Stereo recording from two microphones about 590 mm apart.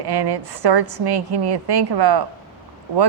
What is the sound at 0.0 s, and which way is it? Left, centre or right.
A woman's voice, right.